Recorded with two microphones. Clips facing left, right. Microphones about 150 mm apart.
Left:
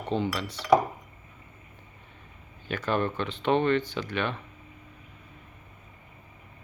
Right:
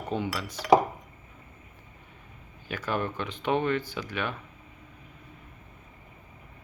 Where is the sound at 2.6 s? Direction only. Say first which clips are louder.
Left 3 dB; 10° right (ahead or behind).